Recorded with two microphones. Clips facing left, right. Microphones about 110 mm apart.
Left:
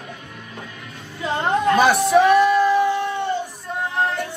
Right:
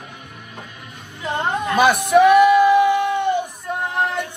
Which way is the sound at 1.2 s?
15° right (ahead or behind).